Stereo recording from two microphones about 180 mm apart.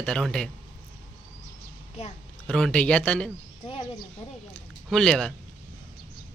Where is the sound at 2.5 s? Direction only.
5° left (ahead or behind).